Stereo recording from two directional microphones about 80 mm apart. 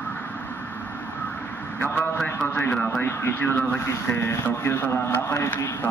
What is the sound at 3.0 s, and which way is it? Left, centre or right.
Speech, left.